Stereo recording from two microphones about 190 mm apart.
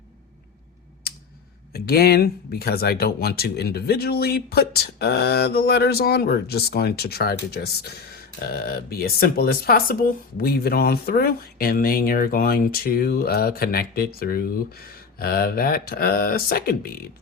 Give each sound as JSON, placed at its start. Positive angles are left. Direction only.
{"t": 1.7, "sound": "speech", "side_deg": 55}